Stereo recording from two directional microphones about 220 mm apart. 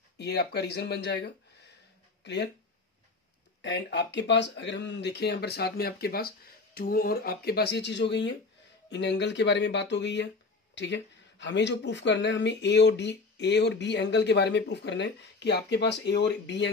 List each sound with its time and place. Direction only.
0.2 s speech: 50° left (ahead or behind)
3.6 s speech: 50° left (ahead or behind)